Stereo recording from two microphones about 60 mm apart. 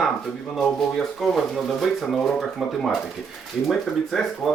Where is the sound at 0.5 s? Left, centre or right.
Centre.